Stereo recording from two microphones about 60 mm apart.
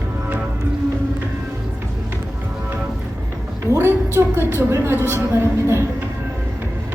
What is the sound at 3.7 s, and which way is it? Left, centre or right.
A woman's voice, right.